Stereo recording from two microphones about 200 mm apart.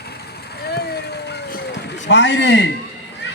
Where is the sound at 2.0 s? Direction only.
60° left (ahead or behind).